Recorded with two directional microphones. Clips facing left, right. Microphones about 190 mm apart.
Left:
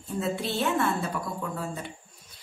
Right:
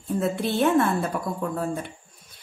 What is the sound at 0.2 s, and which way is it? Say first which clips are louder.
Speech: right 5 dB; 55° right (ahead or behind).